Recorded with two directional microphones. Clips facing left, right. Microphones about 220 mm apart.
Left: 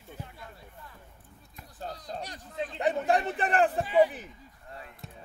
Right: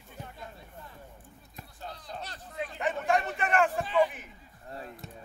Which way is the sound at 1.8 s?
40° left (ahead or behind).